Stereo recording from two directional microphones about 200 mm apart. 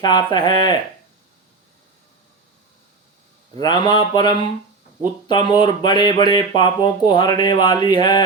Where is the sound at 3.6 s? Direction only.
20° left (ahead or behind).